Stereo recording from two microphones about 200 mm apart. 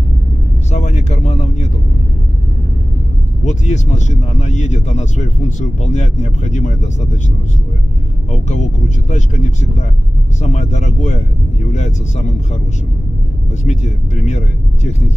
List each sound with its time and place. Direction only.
0.7 s a sound: 35° left (ahead or behind)
3.4 s speech: 35° left (ahead or behind)
8.3 s speech: 35° left (ahead or behind)
13.7 s speech: 35° left (ahead or behind)